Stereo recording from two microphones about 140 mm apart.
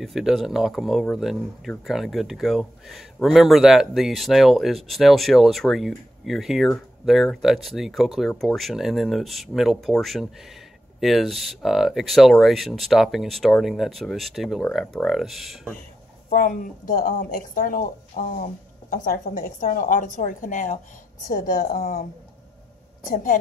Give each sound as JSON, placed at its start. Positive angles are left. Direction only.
{"t": 0.0, "sound": "speech", "side_deg": 0}
{"t": 16.3, "sound": "a woman's voice", "side_deg": 70}
{"t": 21.6, "sound": "a woman's voice", "side_deg": 90}
{"t": 23.0, "sound": "speech", "side_deg": 70}